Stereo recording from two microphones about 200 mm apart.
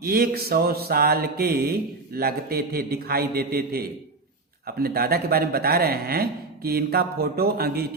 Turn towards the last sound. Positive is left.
turn(degrees=-50)  # may be behind; listen again after turning